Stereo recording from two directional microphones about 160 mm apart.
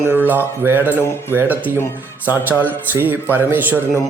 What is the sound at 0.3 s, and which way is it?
A man's voice, 15° right (ahead or behind).